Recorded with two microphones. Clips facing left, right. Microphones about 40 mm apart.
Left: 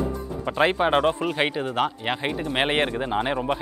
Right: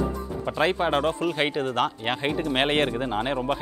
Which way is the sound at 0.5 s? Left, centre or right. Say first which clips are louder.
Left 3 dB; centre.